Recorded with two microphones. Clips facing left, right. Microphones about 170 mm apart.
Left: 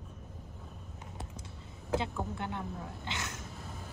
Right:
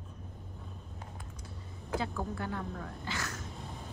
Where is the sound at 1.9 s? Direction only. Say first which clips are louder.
Left 1 dB; 25° left (ahead or behind).